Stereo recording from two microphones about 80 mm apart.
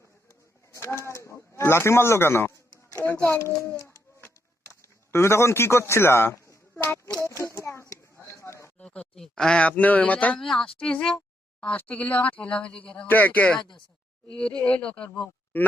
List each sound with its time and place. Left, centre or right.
0.7 s a man's voice: left
3.8 s a sound: left
5.1 s speech: left
7.2 s a sound: left
8.8 s a man's voice: centre
10.4 s a man's voice: centre
14.6 s a man's voice: centre